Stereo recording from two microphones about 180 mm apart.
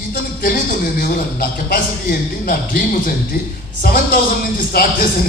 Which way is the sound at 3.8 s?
55° left (ahead or behind).